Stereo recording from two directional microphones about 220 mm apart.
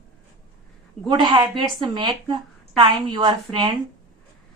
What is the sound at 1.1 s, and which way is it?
A woman's voice, 20° right (ahead or behind).